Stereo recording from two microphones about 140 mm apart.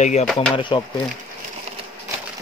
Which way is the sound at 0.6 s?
35° left (ahead or behind).